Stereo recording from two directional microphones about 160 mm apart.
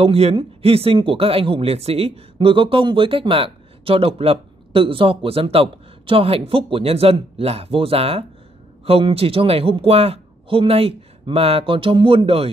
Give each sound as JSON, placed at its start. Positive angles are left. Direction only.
{"t": 0.0, "sound": "speech", "side_deg": -40}